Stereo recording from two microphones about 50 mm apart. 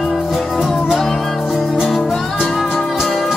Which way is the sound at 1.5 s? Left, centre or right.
Centre.